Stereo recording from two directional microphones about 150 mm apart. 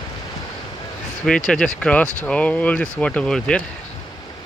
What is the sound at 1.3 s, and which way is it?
Speech, 5° left (ahead or behind).